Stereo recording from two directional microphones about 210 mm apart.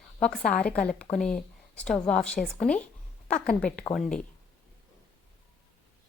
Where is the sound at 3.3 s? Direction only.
45° left (ahead or behind).